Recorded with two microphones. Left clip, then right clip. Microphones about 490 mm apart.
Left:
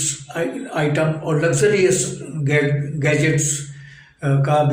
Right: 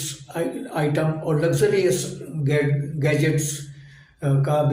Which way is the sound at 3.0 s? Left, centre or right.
Right.